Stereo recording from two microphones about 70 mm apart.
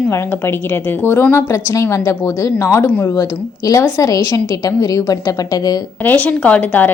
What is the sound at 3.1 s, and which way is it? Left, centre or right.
A woman's voice, left.